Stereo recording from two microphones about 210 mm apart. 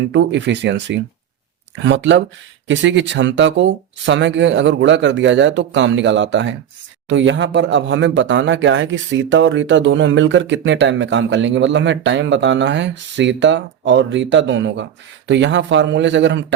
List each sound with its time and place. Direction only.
0.1 s speech: 55° right (ahead or behind)